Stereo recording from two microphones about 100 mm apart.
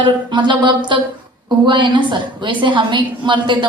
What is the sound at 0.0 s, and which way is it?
Speech, 50° right (ahead or behind).